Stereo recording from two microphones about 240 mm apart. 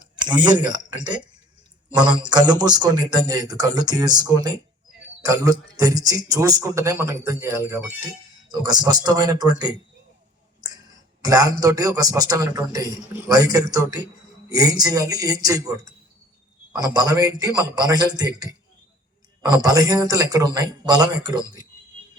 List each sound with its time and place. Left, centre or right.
0.3 s a man's voice: centre
11.2 s a man's voice: centre